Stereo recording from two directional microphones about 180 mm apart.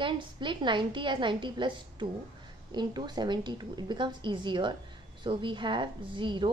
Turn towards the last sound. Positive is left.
turn(degrees=-25)  # may be behind; listen again after turning